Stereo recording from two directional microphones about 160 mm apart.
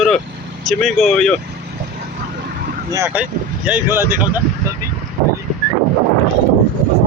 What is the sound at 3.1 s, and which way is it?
Speech, 10° right (ahead or behind).